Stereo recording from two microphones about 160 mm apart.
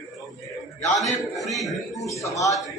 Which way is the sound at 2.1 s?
20° left (ahead or behind).